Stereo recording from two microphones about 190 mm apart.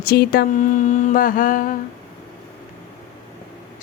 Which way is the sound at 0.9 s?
45° left (ahead or behind).